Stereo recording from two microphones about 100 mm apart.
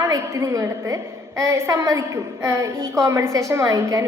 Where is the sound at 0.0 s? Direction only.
30° right (ahead or behind).